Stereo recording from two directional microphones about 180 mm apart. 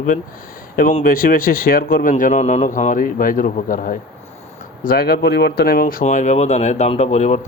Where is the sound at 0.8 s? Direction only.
45° left (ahead or behind).